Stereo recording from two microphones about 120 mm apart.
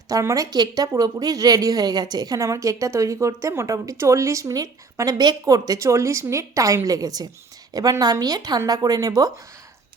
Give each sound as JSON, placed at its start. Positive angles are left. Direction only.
{"t": 0.1, "sound": "a woman's voice", "side_deg": -25}